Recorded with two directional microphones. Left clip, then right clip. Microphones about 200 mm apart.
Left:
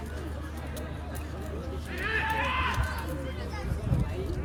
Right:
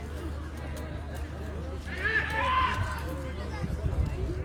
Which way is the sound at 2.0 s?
25° right (ahead or behind).